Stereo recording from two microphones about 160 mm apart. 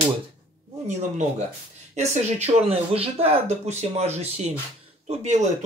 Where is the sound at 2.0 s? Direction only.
45° right (ahead or behind).